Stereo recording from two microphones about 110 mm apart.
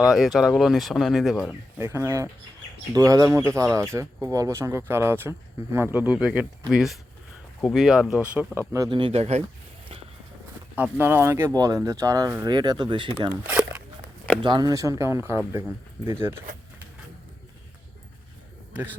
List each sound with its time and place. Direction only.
0.1 s speech: centre (ahead or behind)
1.8 s speech: 25° right (ahead or behind)
8.5 s speech: 30° right (ahead or behind)
8.9 s speech: 50° right (ahead or behind)
10.8 s speech: 15° right (ahead or behind); by 13.1 s 45° right (ahead or behind)
13.5 s walk: 10° right (ahead or behind)
14.4 s speech: 40° right (ahead or behind); by 16.4 s 20° right (ahead or behind)
18.7 s speech: 15° right (ahead or behind)